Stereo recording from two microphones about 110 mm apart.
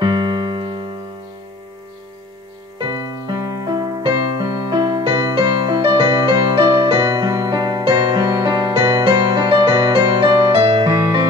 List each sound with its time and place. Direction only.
0.0 s keyboard: 45° right (ahead or behind)
2.9 s music: 35° right (ahead or behind)
5.8 s music: 50° right (ahead or behind)
7.0 s music: 35° right (ahead or behind); by 10.9 s 55° right (ahead or behind)